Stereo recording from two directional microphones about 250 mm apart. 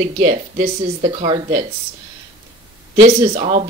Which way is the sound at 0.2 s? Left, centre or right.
Right.